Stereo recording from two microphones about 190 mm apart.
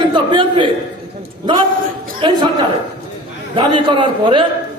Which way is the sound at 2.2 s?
25° right (ahead or behind).